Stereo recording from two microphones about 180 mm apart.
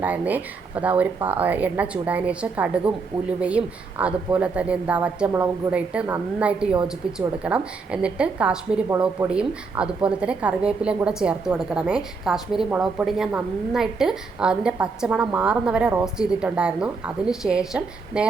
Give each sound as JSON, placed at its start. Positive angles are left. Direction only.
{"t": 0.0, "sound": "a woman's voice", "side_deg": -10}